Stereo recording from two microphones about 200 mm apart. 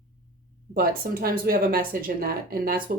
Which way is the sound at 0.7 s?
45° right (ahead or behind).